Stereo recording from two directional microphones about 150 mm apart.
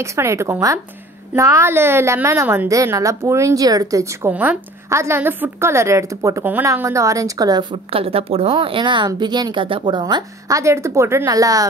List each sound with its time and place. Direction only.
0.0 s a woman's voice: 20° right (ahead or behind)